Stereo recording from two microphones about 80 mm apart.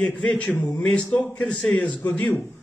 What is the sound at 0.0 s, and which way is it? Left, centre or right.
A man's voice, centre.